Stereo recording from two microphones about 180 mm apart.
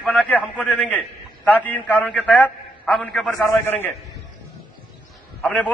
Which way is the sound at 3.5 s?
10° left (ahead or behind).